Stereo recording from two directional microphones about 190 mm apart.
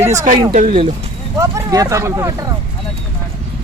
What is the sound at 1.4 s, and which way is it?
Speech, 15° right (ahead or behind).